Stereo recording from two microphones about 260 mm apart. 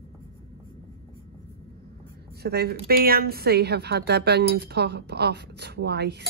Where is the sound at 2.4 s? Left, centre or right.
Right.